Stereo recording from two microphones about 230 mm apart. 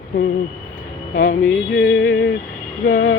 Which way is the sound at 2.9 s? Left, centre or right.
Left.